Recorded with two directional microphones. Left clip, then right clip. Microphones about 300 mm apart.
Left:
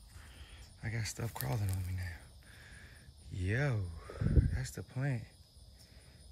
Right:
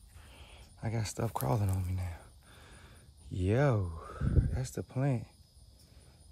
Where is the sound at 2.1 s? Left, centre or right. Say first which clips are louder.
Left 1 dB; centre.